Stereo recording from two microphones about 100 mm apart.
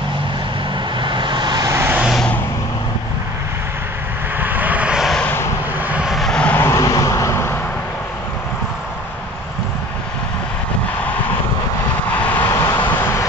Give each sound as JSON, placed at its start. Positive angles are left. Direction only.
{"t": 1.0, "sound": "vehicle", "side_deg": -50}
{"t": 1.7, "sound": "vehicle", "side_deg": -25}
{"t": 2.0, "sound": "vehicle", "side_deg": -5}
{"t": 4.4, "sound": "vehicle", "side_deg": -20}
{"t": 5.2, "sound": "vehicle", "side_deg": 20}
{"t": 5.8, "sound": "vehicle", "side_deg": -15}
{"t": 6.5, "sound": "vehicle", "side_deg": 25}
{"t": 12.1, "sound": "vehicle", "side_deg": 15}
{"t": 12.4, "sound": "vehicle", "side_deg": 40}
{"t": 12.8, "sound": "vehicle", "side_deg": 20}